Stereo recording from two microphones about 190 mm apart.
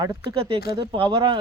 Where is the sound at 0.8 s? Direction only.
25° right (ahead or behind).